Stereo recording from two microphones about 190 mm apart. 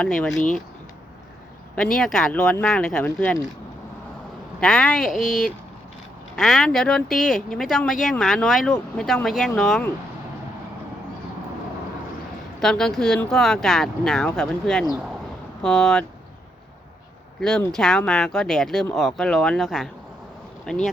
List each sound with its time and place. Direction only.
0.0 s speech: 5° left (ahead or behind)
1.7 s speech: 5° left (ahead or behind)
4.6 s speech: 5° left (ahead or behind)
12.6 s speech: 5° left (ahead or behind)
17.7 s speech: centre (ahead or behind)